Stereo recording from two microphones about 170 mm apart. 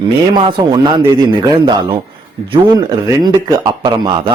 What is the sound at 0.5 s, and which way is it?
Speech, 25° right (ahead or behind).